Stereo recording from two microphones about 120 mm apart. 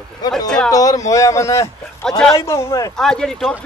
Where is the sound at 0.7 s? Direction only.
30° left (ahead or behind).